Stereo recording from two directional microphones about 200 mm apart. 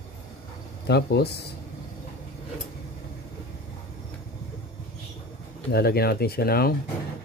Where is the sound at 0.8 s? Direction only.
55° left (ahead or behind).